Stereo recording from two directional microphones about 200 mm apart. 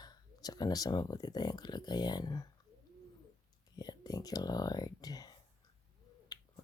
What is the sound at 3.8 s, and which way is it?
Speech, 20° left (ahead or behind).